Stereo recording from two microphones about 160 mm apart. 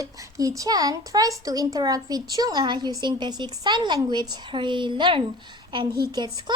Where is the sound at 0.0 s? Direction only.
20° right (ahead or behind).